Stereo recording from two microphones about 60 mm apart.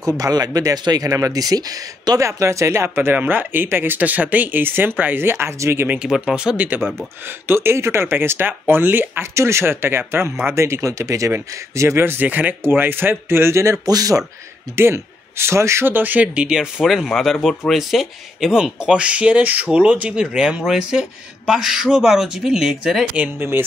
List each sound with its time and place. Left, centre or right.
0.2 s speech: right
2.2 s speech: right
2.9 s speech: right
6.0 s speech: centre
6.5 s speech: right
6.8 s speech: centre
7.2 s speech: right
10.5 s speech: right
12.3 s speech: right
13.8 s speech: right
14.8 s a man's voice: right
15.9 s speech: right
16.4 s speech: centre